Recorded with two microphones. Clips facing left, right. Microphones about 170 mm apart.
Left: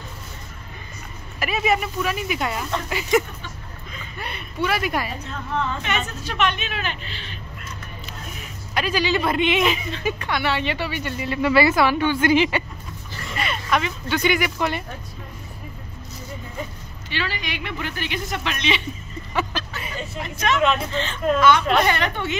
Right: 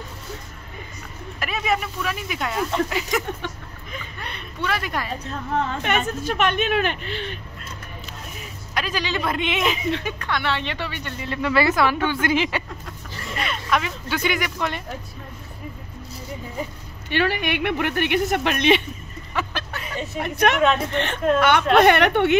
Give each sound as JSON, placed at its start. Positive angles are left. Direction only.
{"t": 1.4, "sound": "speech", "side_deg": 5}
{"t": 5.6, "sound": "a woman's voice", "side_deg": -50}
{"t": 8.7, "sound": "speech", "side_deg": 0}
{"t": 17.1, "sound": "speech", "side_deg": -55}
{"t": 20.2, "sound": "speech", "side_deg": -60}